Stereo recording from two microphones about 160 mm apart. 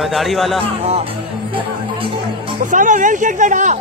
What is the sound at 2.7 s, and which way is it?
Speech, 55° right (ahead or behind).